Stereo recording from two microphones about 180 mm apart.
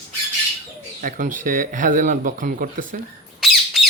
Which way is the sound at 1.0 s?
50° right (ahead or behind).